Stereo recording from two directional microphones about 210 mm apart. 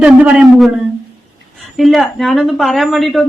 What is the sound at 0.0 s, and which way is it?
A woman's voice, 5° right (ahead or behind).